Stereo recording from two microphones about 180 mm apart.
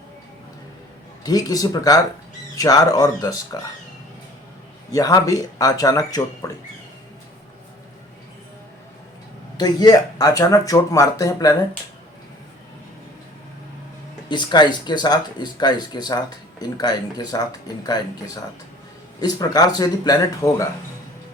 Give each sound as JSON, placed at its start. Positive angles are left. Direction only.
{"t": 1.2, "sound": "speech", "side_deg": 20}
{"t": 4.9, "sound": "speech", "side_deg": 20}
{"t": 9.6, "sound": "speech", "side_deg": 20}
{"t": 14.3, "sound": "speech", "side_deg": 25}
{"t": 19.2, "sound": "speech", "side_deg": 20}